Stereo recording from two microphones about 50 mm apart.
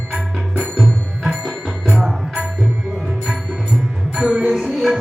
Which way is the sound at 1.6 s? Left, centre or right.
Centre.